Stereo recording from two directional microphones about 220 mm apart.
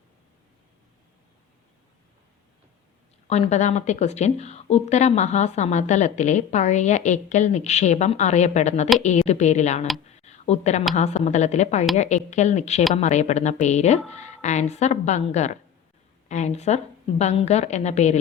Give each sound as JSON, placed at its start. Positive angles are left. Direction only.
{"t": 3.2, "sound": "a woman's voice", "side_deg": 30}